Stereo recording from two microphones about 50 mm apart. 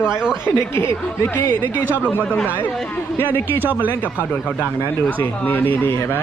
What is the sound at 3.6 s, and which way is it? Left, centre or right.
Speech, right.